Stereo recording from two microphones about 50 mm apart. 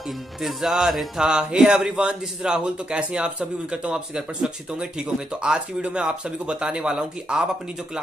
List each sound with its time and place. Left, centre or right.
0.4 s speech: centre